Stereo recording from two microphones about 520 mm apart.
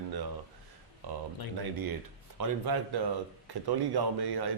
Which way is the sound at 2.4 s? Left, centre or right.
Right.